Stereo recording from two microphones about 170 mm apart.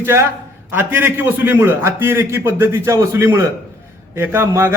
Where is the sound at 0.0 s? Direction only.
15° right (ahead or behind).